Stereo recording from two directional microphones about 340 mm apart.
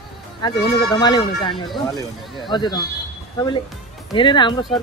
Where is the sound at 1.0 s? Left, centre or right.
Centre.